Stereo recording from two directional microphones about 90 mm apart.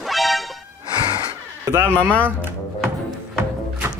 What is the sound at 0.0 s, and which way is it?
Music, centre (ahead or behind).